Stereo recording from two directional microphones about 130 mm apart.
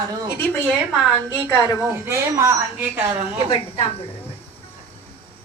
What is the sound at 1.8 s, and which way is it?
Speech, 20° right (ahead or behind).